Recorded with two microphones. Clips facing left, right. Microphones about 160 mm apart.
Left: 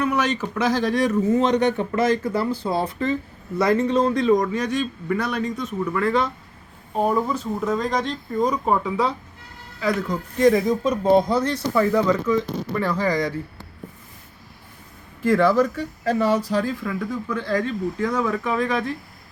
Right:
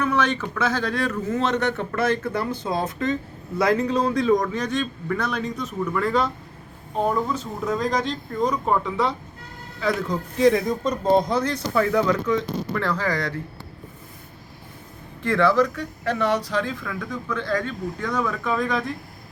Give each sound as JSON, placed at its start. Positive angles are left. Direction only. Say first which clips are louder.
{"t": 0.0, "sound": "a sound", "louder": "even", "side_deg": 10}
{"t": 0.4, "sound": "speech", "louder": "left 3 dB", "side_deg": 20}
{"t": 2.6, "sound": "speech", "louder": "left 1 dB", "side_deg": 5}
{"t": 10.3, "sound": "speech", "louder": "left 2 dB", "side_deg": 0}
{"t": 15.2, "sound": "speech", "louder": "left 2 dB", "side_deg": 10}